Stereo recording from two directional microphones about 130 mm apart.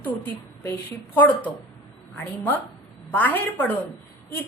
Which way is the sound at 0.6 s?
15° left (ahead or behind).